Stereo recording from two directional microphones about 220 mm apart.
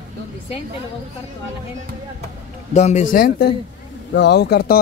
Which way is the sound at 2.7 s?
30° left (ahead or behind).